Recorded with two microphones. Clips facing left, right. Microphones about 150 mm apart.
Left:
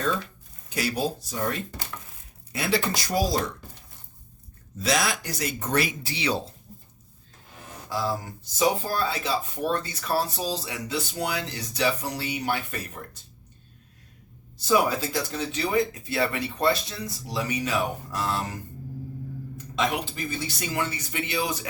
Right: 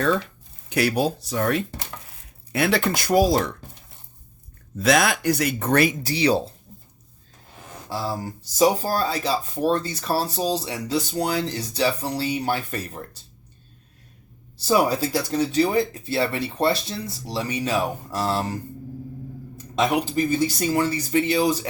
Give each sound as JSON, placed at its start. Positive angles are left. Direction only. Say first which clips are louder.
{"t": 0.7, "sound": "speech", "louder": "right 6 dB", "side_deg": -65}
{"t": 4.8, "sound": "speech", "louder": "right 6 dB", "side_deg": -55}
{"t": 6.0, "sound": "speech", "louder": "right 7 dB", "side_deg": -40}
{"t": 7.9, "sound": "speech", "louder": "right 1 dB", "side_deg": -30}
{"t": 14.6, "sound": "speech", "louder": "right 3 dB", "side_deg": -35}
{"t": 19.7, "sound": "speech", "louder": "right 6 dB", "side_deg": -40}